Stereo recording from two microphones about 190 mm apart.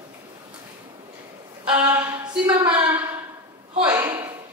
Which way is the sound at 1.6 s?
5° right (ahead or behind).